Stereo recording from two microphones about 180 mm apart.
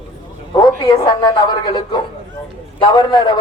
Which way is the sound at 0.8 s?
20° left (ahead or behind).